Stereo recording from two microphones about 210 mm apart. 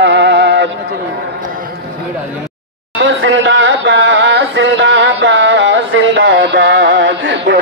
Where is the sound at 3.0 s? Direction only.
70° right (ahead or behind).